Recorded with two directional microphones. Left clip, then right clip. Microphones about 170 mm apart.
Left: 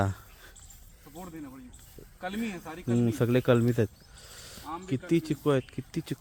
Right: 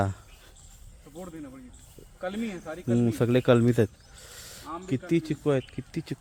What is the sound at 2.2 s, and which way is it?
Speech, 60° left (ahead or behind).